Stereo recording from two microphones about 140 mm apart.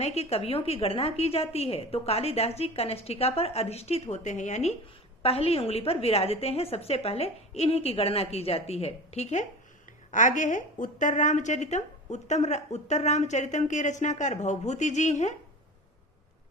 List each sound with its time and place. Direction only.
0.0 s a woman's voice: 50° left (ahead or behind)
5.2 s a woman's voice: 45° left (ahead or behind)
10.1 s a woman's voice: 65° left (ahead or behind)